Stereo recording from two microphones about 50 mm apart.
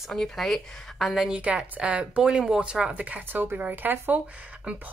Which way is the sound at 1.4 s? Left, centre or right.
Right.